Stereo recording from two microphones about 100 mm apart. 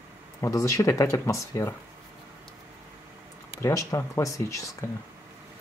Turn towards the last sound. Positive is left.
turn(degrees=30)  # may be behind; listen again after turning